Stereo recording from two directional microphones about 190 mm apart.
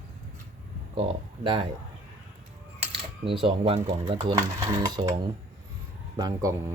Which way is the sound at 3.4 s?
30° right (ahead or behind).